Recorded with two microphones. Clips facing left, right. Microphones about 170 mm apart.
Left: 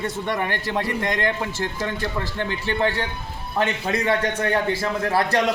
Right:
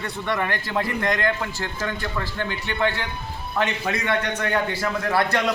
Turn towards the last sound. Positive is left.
turn(degrees=30)  # may be behind; listen again after turning